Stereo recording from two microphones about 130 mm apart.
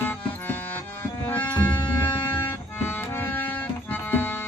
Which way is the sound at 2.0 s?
15° left (ahead or behind).